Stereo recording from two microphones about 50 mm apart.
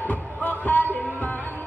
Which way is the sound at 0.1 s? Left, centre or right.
Left.